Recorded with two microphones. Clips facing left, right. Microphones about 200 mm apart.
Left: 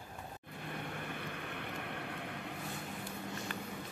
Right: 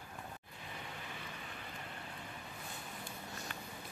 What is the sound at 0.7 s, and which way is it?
Vehicle, 60° left (ahead or behind).